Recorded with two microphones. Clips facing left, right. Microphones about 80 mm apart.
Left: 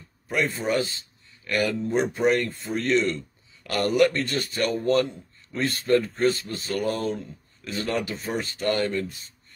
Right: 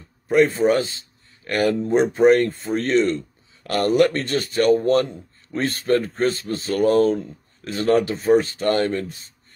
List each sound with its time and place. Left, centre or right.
0.3 s a man's voice: right
1.9 s speech: right
3.6 s speech: right